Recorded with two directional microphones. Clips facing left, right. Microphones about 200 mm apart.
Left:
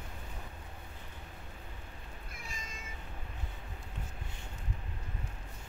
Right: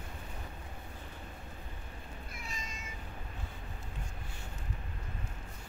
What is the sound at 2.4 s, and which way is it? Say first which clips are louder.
Cat: right 1 dB; 50° left (ahead or behind).